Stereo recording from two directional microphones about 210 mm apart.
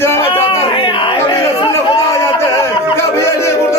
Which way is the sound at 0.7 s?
25° left (ahead or behind).